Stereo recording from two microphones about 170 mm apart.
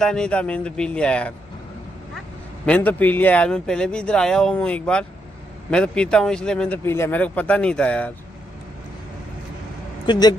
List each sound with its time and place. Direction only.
0.0 s speech: 5° left (ahead or behind)
2.6 s speech: 10° left (ahead or behind)
10.0 s speech: 25° left (ahead or behind)